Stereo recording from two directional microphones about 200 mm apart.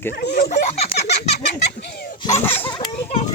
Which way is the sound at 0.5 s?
30° left (ahead or behind).